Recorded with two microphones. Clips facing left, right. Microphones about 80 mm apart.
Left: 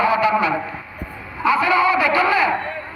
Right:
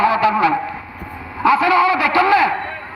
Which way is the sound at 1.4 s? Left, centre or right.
Right.